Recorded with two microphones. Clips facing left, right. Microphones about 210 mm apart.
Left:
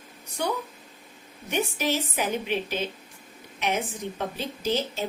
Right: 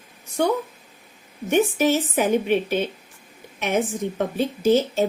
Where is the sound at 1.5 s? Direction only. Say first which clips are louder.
Right 8 dB; 50° right (ahead or behind).